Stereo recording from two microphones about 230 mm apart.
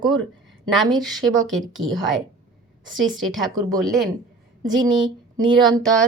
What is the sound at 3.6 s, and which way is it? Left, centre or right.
Speech, centre.